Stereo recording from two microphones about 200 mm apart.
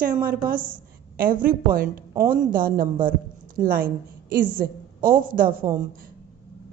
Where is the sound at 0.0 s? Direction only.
45° right (ahead or behind).